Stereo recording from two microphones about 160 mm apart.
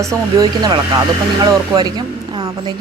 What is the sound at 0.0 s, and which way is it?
A woman's voice, 20° right (ahead or behind).